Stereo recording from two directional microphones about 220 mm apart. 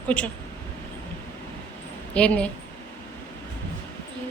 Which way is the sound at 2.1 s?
5° left (ahead or behind).